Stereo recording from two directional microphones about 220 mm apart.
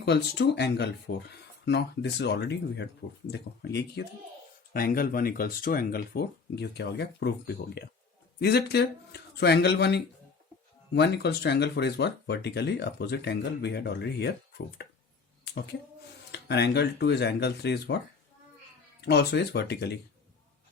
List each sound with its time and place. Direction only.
0.0 s speech: 50° left (ahead or behind)
15.4 s a sound: 50° left (ahead or behind)
16.3 s speech: 50° left (ahead or behind)
19.0 s speech: 50° left (ahead or behind)